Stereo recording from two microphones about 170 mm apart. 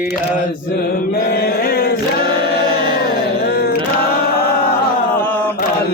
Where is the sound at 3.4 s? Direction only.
65° left (ahead or behind).